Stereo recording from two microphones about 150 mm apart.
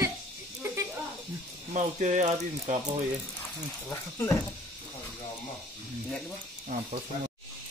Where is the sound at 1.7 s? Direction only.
55° right (ahead or behind).